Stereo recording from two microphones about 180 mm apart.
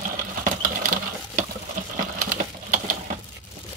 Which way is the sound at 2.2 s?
50° right (ahead or behind).